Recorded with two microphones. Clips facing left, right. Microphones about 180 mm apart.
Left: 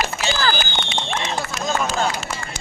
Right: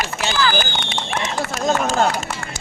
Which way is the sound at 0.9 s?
50° right (ahead or behind).